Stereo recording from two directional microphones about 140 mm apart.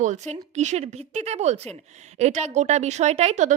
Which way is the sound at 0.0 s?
55° right (ahead or behind).